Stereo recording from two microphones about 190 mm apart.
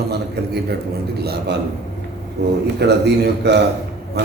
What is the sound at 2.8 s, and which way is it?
Speech, 65° right (ahead or behind).